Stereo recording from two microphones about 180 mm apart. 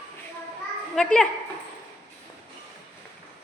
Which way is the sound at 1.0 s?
5° left (ahead or behind).